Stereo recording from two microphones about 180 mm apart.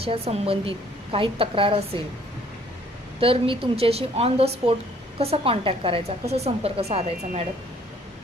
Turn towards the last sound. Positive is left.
turn(degrees=-35)  # may be behind; listen again after turning